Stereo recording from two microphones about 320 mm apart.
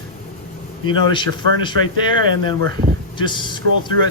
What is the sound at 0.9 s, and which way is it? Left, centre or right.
Speech, centre.